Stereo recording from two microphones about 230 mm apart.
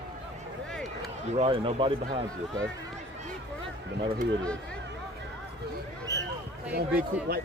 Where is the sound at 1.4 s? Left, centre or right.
Right.